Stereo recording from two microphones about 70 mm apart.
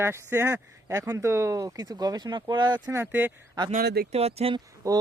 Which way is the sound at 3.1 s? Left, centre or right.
Right.